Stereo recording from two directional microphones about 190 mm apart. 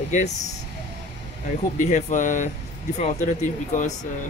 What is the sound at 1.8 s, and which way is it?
Speech, 40° left (ahead or behind).